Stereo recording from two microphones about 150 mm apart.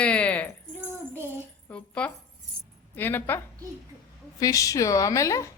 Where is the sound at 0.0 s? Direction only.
10° left (ahead or behind).